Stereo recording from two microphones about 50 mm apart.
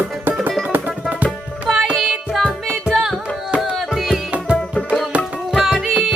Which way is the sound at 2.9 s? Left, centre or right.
Centre.